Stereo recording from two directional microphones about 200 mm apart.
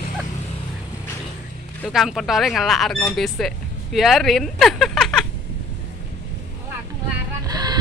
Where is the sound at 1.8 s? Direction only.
Centre (ahead or behind).